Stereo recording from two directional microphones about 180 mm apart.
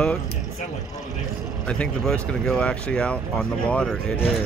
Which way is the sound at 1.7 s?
5° left (ahead or behind).